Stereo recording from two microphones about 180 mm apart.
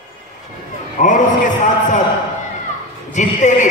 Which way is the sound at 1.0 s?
45° left (ahead or behind).